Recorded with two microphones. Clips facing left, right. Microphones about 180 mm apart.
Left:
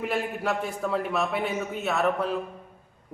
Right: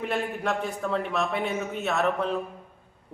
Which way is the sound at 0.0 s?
Centre (ahead or behind).